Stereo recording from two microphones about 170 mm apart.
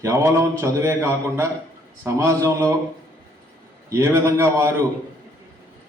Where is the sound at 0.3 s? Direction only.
15° right (ahead or behind).